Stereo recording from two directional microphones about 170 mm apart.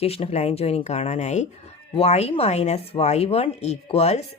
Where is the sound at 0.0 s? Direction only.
35° left (ahead or behind).